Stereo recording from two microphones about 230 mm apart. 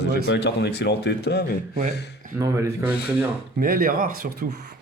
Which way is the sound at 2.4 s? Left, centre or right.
Centre.